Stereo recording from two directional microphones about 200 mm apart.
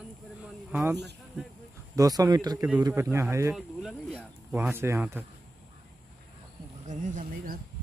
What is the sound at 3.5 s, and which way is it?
Speech, centre (ahead or behind).